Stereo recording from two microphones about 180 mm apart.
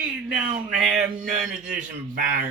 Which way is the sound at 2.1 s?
45° right (ahead or behind).